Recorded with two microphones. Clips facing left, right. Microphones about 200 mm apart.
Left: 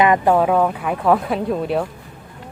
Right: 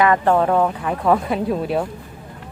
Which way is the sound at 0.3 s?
5° left (ahead or behind).